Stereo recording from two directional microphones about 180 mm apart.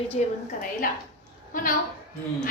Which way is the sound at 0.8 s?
50° left (ahead or behind).